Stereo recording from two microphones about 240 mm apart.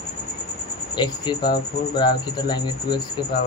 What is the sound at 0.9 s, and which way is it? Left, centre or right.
Speech, centre.